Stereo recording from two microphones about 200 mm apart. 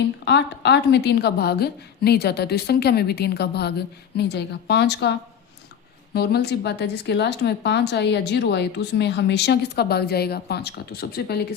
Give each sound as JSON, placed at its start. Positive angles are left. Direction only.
{"t": 0.3, "sound": "speech", "side_deg": 55}
{"t": 6.1, "sound": "speech", "side_deg": 55}